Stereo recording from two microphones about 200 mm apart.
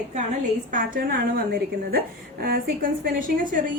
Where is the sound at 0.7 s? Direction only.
40° right (ahead or behind).